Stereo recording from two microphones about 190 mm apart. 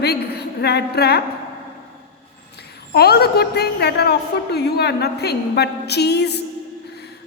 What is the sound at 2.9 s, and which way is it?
A woman's voice, 60° left (ahead or behind).